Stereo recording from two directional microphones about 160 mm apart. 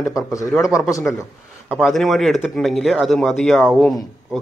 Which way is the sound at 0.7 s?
20° left (ahead or behind).